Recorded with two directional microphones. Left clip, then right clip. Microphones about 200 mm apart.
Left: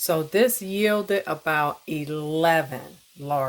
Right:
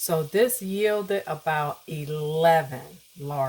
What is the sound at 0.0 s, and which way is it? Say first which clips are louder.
Speech: left 2 dB; 35° left (ahead or behind).